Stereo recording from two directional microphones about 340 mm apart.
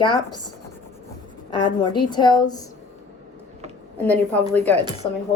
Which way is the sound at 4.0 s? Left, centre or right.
Centre.